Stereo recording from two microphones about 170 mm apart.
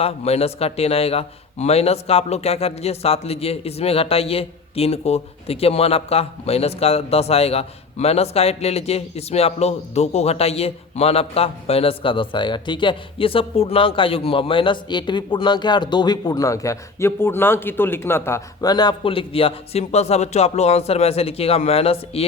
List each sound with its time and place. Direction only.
0.0 s a man's voice: 35° left (ahead or behind)